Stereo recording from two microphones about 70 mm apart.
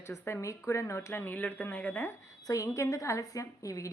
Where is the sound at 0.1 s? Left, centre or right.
Left.